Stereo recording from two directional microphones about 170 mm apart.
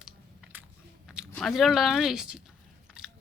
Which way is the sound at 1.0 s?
5° right (ahead or behind).